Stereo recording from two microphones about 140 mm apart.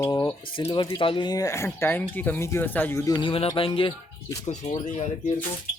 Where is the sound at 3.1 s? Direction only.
35° left (ahead or behind).